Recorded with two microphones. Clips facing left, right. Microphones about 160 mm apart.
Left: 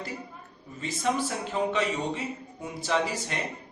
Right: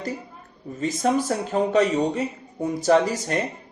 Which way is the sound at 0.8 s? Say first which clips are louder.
Right 6 dB; 45° right (ahead or behind).